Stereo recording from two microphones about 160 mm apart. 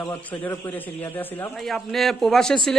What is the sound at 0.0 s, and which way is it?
Speech, 15° left (ahead or behind).